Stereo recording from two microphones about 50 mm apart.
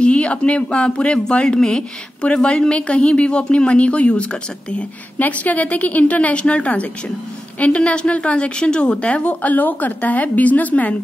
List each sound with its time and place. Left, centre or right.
0.0 s a woman's voice: left
5.2 s a woman's voice: left